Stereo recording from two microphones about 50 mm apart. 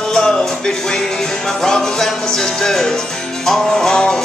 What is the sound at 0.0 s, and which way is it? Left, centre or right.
Music, centre.